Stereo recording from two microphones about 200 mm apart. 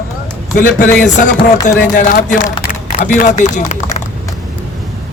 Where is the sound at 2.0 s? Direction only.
45° left (ahead or behind).